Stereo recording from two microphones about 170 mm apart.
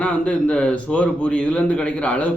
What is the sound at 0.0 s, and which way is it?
A man's voice, 5° left (ahead or behind).